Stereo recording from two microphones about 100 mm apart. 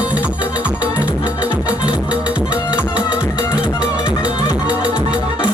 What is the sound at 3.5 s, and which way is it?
Music, 45° left (ahead or behind).